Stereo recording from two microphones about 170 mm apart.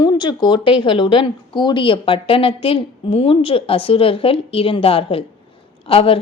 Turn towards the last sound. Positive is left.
turn(degrees=35)  # may be behind; listen again after turning